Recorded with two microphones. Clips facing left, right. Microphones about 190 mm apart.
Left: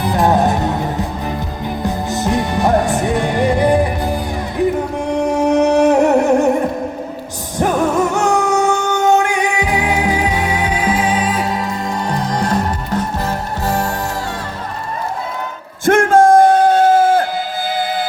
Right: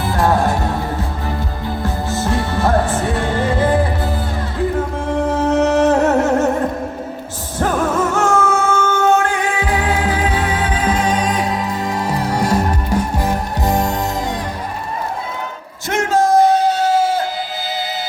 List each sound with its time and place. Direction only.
0.0 s music: 20° left (ahead or behind); by 13.9 s 15° right (ahead or behind)
15.9 s bellow: 55° left (ahead or behind)